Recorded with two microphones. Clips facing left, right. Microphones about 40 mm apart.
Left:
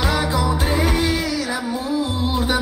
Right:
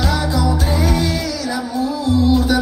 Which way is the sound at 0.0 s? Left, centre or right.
Centre.